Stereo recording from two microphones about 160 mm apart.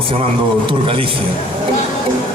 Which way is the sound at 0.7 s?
35° right (ahead or behind).